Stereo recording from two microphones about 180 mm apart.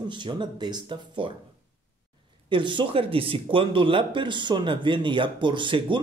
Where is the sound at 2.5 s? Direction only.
25° right (ahead or behind).